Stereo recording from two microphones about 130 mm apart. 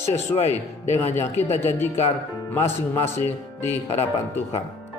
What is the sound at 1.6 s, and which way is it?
Speech, 20° left (ahead or behind).